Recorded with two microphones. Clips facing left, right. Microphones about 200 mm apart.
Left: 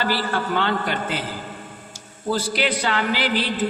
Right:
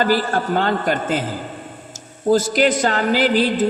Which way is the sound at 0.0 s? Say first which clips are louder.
Right 5 dB; 45° right (ahead or behind).